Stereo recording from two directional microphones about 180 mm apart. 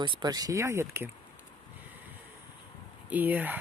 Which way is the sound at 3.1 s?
10° right (ahead or behind).